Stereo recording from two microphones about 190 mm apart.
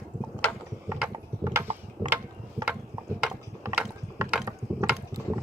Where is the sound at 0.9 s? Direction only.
10° right (ahead or behind).